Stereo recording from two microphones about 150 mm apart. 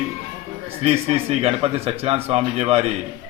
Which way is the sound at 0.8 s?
45° right (ahead or behind).